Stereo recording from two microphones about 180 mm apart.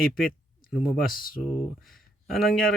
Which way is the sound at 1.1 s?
50° left (ahead or behind).